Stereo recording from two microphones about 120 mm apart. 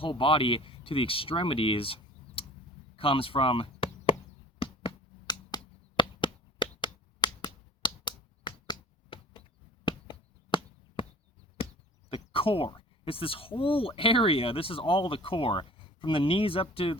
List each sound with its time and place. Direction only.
0.0 s speech: 45° left (ahead or behind)
4.6 s a sound: 45° left (ahead or behind)
9.8 s chop: 45° left (ahead or behind)
12.1 s speech: 50° left (ahead or behind)